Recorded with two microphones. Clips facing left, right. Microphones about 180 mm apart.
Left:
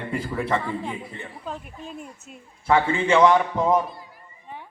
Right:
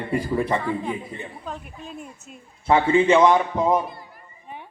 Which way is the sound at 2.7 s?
20° right (ahead or behind).